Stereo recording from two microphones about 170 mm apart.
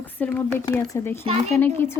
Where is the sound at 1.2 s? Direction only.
35° right (ahead or behind).